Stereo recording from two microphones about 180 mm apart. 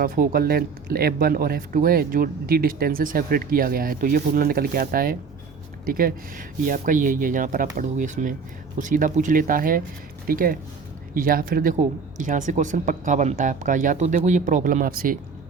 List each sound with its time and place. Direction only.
0.0 s speech: 55° right (ahead or behind)